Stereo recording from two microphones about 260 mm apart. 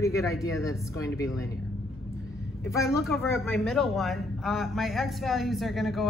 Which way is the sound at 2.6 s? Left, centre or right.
Centre.